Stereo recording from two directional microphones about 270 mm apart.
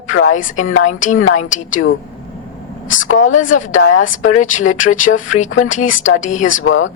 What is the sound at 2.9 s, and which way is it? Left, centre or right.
Speech, left.